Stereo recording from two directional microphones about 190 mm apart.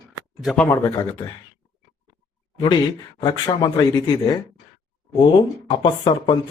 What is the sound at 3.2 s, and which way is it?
Speech, 20° left (ahead or behind).